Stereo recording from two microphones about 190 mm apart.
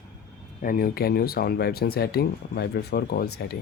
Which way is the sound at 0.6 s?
45° left (ahead or behind).